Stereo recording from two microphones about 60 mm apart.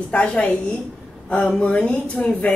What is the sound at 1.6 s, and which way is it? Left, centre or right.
Speech, centre.